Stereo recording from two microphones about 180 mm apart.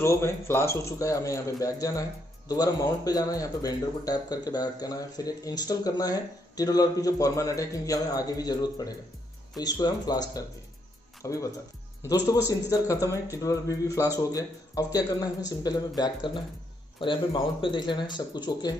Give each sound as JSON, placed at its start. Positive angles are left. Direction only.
{"t": 0.0, "sound": "a man's voice", "side_deg": 15}